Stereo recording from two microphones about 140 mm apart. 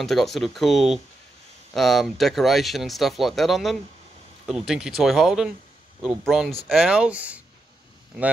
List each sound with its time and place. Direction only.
0.0 s speech: centre (ahead or behind)